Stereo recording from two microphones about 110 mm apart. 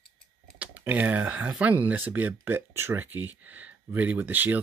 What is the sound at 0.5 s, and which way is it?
Speech, 15° right (ahead or behind).